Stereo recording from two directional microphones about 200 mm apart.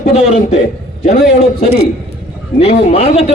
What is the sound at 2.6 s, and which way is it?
Speech, 30° left (ahead or behind).